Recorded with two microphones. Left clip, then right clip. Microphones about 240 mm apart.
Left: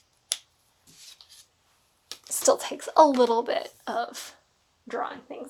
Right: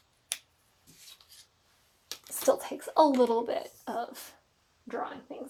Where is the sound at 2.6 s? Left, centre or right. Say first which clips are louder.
Left 8 dB; left.